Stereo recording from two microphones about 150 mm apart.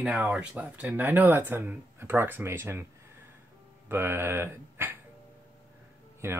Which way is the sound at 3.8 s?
15° right (ahead or behind).